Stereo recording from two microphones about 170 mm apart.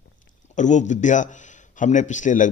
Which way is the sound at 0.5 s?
45° left (ahead or behind).